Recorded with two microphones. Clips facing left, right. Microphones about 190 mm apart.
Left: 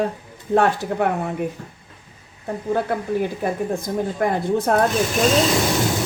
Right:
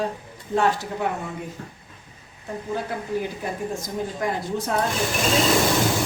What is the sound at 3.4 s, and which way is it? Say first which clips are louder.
Speech: left 6 dB; 55° left (ahead or behind).